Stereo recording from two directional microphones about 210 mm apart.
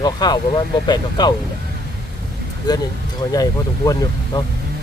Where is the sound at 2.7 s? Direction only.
20° left (ahead or behind).